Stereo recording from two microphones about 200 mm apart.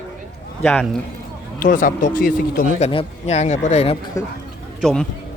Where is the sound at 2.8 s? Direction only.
30° left (ahead or behind).